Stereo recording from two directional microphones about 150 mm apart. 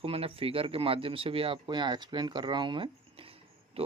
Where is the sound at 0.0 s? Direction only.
40° right (ahead or behind).